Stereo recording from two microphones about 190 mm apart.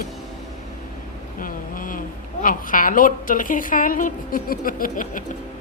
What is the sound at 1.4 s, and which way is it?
Vehicle, 45° left (ahead or behind).